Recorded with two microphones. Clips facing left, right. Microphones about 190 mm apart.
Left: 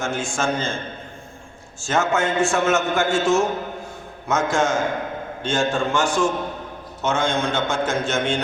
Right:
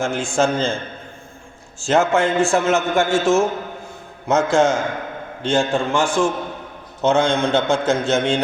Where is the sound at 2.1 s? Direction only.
30° right (ahead or behind).